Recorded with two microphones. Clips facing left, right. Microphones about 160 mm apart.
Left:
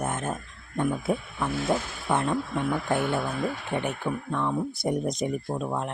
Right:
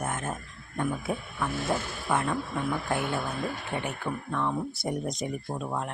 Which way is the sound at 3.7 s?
20° left (ahead or behind).